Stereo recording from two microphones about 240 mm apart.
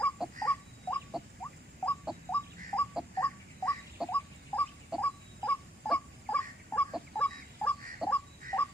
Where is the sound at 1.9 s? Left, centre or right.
Centre.